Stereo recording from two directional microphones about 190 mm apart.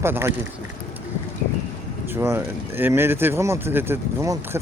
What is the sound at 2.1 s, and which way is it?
Speech, 10° right (ahead or behind).